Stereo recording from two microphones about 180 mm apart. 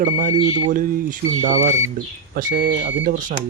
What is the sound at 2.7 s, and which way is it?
Speech, 80° right.